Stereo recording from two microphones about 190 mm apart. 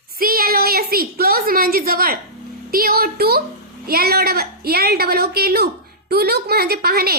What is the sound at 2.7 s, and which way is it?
A woman's voice, 50° right (ahead or behind).